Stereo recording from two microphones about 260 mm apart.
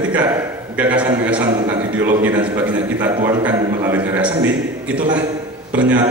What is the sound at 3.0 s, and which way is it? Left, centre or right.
A man's voice, centre.